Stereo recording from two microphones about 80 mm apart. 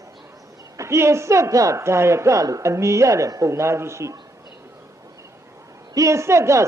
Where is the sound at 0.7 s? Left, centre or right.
Right.